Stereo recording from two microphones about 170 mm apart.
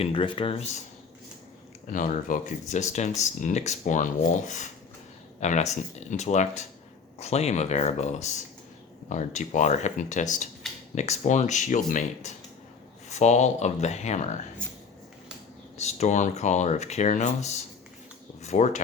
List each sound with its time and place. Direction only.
0.0 s speech: 30° left (ahead or behind)
1.9 s speech: 50° left (ahead or behind)
15.8 s speech: 40° left (ahead or behind)